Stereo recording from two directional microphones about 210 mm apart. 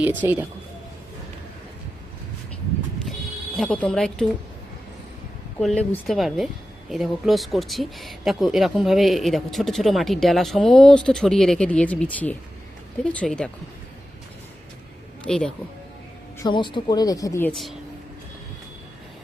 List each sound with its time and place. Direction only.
0.0 s speech: 10° right (ahead or behind)
3.6 s speech: 5° left (ahead or behind)
5.5 s speech: 5° left (ahead or behind)
15.2 s speech: 5° left (ahead or behind)
16.4 s speech: 20° left (ahead or behind)
17.5 s speech: centre (ahead or behind)